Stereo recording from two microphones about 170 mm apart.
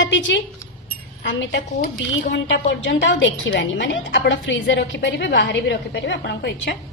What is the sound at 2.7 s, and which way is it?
A woman's voice, 90° left.